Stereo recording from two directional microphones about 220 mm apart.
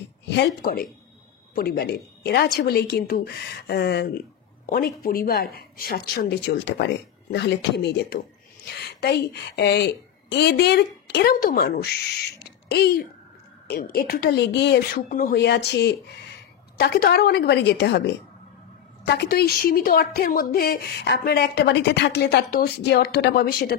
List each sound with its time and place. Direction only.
0.3 s a woman's voice: 45° left (ahead or behind)